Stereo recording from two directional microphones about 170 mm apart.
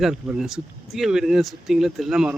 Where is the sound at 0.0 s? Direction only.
5° right (ahead or behind).